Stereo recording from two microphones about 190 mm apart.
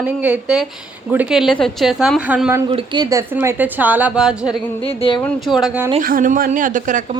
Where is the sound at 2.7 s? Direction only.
20° right (ahead or behind); by 4.5 s 5° right (ahead or behind).